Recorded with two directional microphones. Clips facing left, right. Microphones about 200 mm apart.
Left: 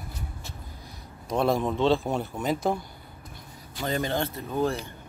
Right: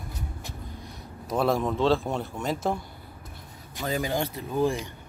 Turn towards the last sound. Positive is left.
turn(degrees=-15)  # may be behind; listen again after turning